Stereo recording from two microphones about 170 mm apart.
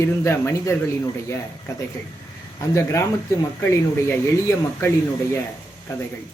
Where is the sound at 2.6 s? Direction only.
15° left (ahead or behind).